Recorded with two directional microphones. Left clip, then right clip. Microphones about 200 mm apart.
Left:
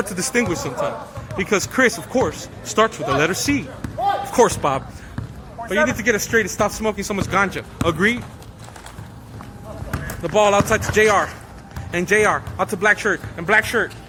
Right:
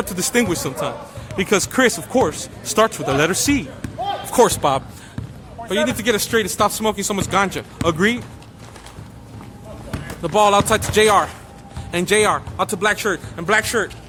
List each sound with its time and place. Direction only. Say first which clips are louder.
0.0 s speech: even; 15° right (ahead or behind)
0.3 s speech: right 1 dB; 30° right (ahead or behind)
10.2 s speech: right 1 dB; 20° right (ahead or behind)